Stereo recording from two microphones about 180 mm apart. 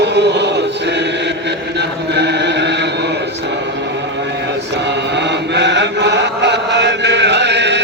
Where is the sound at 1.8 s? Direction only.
70° right (ahead or behind).